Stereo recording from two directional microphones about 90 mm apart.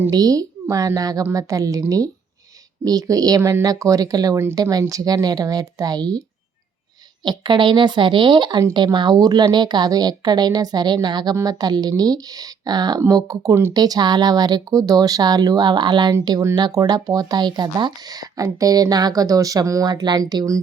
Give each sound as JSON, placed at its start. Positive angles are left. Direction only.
{"t": 0.1, "sound": "a woman's voice", "side_deg": -45}
{"t": 2.8, "sound": "speech", "side_deg": -45}
{"t": 7.3, "sound": "speech", "side_deg": -60}
{"t": 13.0, "sound": "a woman's voice", "side_deg": -40}
{"t": 13.7, "sound": "speech", "side_deg": -45}